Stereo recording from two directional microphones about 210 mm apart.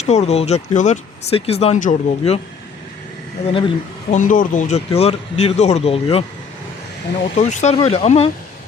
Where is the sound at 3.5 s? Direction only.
25° left (ahead or behind).